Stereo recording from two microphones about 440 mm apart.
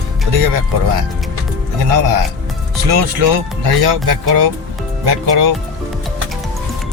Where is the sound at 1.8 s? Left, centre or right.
Right.